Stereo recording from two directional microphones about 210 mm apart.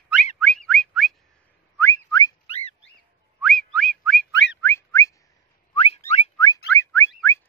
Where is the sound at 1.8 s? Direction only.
15° left (ahead or behind).